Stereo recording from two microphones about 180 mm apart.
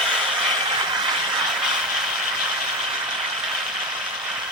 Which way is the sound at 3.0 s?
5° right (ahead or behind).